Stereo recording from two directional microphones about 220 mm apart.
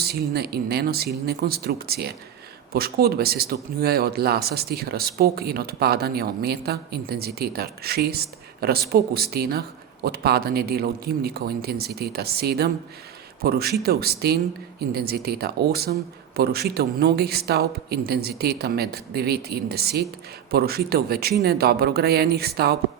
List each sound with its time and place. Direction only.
0.0 s speech: 45° right (ahead or behind)